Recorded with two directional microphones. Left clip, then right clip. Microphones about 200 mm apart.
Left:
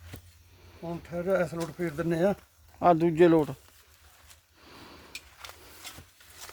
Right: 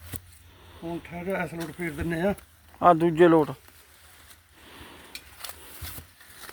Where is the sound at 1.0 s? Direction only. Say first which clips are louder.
Left 4 dB; 15° left (ahead or behind).